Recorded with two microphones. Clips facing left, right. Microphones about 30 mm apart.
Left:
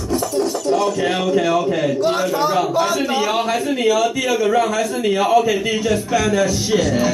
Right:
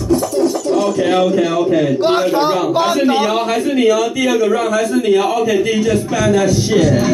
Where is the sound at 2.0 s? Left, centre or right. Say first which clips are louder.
Right 4 dB; right.